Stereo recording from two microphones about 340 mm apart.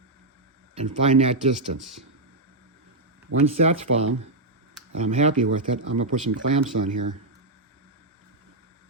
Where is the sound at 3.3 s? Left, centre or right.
Right.